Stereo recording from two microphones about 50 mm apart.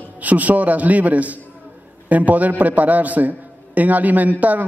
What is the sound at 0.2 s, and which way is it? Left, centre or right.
A man's voice, right.